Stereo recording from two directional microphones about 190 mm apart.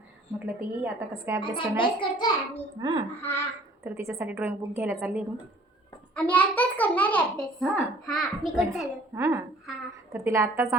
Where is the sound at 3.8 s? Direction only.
10° right (ahead or behind).